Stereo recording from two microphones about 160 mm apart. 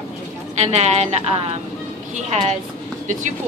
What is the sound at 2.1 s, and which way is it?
Speech, 45° right (ahead or behind).